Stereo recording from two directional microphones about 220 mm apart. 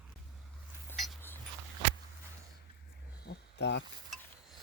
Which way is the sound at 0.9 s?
Centre (ahead or behind).